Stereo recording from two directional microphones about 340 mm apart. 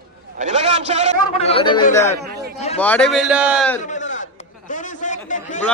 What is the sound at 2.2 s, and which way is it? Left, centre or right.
Speech, right.